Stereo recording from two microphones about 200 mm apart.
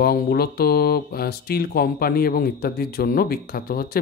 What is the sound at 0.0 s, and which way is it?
A man's voice, 50° left (ahead or behind).